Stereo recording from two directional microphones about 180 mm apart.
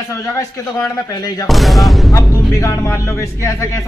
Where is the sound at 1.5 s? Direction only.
Centre (ahead or behind).